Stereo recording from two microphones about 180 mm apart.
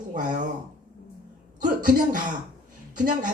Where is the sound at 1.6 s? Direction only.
50° right (ahead or behind).